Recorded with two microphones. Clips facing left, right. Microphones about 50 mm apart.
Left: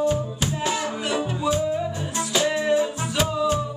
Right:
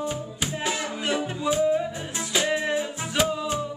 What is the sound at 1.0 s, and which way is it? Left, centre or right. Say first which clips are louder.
Music: even; right.